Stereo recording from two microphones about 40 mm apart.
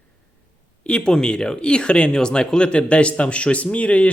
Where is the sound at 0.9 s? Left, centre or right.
Left.